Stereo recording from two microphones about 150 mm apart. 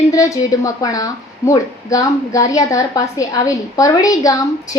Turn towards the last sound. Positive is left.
turn(degrees=25)  # may be behind; listen again after turning